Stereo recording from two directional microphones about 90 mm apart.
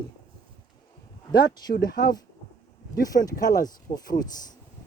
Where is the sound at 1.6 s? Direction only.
50° left (ahead or behind).